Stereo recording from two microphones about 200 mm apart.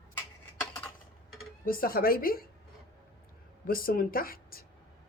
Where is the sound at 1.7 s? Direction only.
45° left (ahead or behind).